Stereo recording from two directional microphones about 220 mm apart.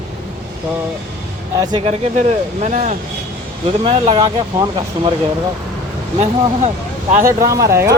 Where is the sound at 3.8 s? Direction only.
20° right (ahead or behind).